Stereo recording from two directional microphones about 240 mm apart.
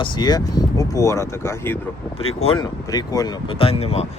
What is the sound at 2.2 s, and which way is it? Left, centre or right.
Speech, left.